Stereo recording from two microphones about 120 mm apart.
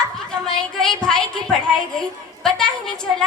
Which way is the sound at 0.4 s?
5° left (ahead or behind).